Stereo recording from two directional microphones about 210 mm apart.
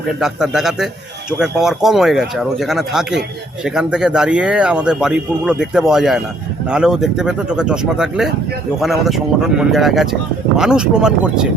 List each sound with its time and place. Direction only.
0.2 s speech: centre (ahead or behind)